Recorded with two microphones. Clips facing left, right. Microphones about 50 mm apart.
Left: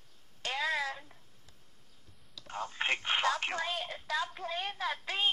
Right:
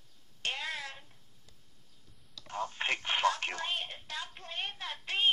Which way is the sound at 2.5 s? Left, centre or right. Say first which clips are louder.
Even; left.